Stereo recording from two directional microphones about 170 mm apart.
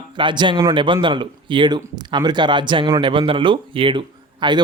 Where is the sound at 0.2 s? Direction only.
30° right (ahead or behind).